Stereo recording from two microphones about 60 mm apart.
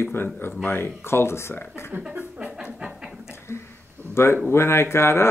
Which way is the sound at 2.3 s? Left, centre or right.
Centre.